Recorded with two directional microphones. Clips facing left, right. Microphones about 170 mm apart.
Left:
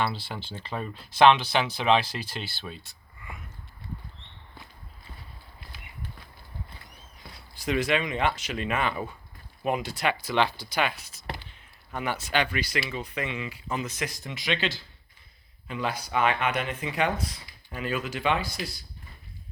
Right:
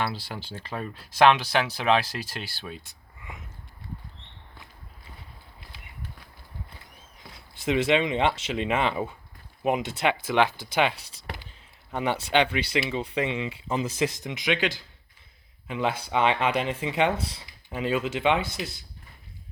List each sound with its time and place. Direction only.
0.0 s speech: 10° right (ahead or behind)
7.2 s speech: 20° right (ahead or behind)